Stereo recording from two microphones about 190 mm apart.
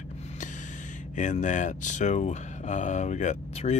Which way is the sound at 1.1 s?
40° left (ahead or behind).